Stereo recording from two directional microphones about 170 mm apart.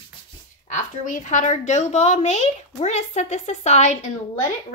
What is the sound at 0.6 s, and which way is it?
A woman's voice, 45° left (ahead or behind).